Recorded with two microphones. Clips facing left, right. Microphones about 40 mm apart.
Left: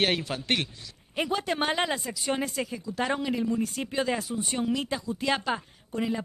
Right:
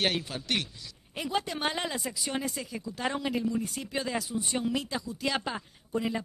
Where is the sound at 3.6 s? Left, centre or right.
Left.